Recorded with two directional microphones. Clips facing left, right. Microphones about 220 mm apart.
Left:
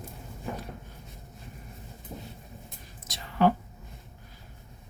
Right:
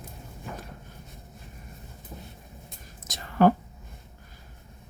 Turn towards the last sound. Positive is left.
turn(degrees=-45)  # may be behind; listen again after turning